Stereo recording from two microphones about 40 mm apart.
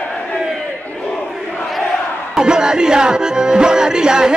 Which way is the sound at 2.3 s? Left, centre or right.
Centre.